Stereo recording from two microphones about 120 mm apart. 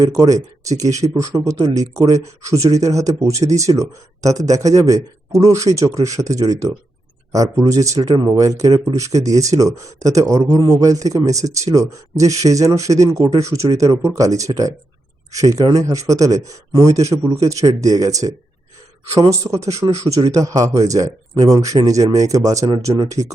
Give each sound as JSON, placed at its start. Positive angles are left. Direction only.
{"t": 0.0, "sound": "speech", "side_deg": -30}
{"t": 8.0, "sound": "speech", "side_deg": -35}
{"t": 19.3, "sound": "speech", "side_deg": -25}